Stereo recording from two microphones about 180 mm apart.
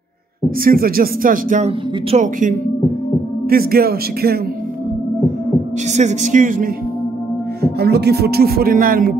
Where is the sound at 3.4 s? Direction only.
60° right (ahead or behind).